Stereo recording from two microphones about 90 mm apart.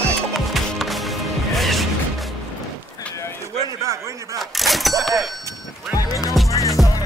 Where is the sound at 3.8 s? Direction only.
35° right (ahead or behind).